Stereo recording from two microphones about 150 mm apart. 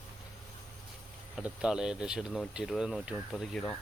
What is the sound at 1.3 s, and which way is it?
Speech, 5° right (ahead or behind).